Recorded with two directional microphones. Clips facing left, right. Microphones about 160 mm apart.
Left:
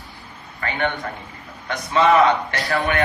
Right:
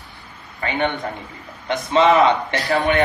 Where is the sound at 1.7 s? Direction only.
20° right (ahead or behind).